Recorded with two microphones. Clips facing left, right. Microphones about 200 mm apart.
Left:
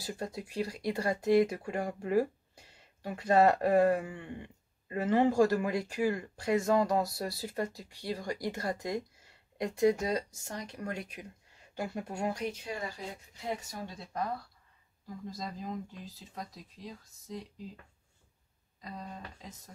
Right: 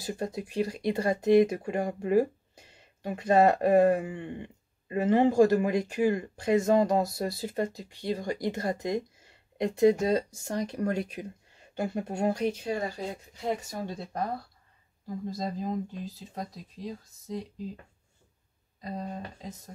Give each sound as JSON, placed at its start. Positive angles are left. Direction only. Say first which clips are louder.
{"t": 0.0, "sound": "speech", "louder": "right 5 dB", "side_deg": -20}
{"t": 18.8, "sound": "speech", "louder": "right 7 dB", "side_deg": -40}